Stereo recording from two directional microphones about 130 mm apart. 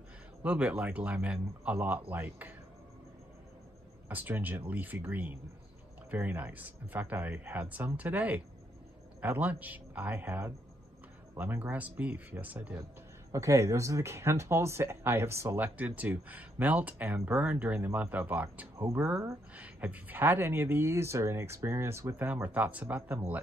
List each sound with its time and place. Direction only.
0.4 s speech: 10° right (ahead or behind)
4.1 s speech: 15° right (ahead or behind)
18.8 s speech: 25° right (ahead or behind)
19.5 s speech: 10° right (ahead or behind)